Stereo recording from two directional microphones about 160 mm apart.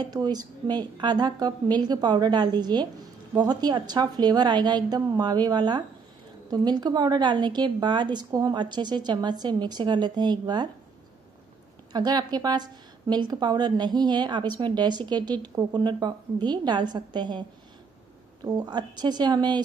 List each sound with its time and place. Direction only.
0.0 s a woman's voice: 25° right (ahead or behind)
11.9 s a woman's voice: 25° right (ahead or behind)